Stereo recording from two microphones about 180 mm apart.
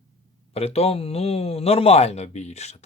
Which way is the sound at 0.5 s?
35° left (ahead or behind).